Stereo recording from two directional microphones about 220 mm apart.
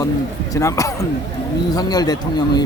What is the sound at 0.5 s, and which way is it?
Speech, 15° left (ahead or behind).